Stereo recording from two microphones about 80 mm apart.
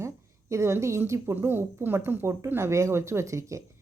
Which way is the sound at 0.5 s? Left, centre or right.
Right.